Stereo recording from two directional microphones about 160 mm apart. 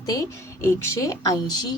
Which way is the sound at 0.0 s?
20° left (ahead or behind).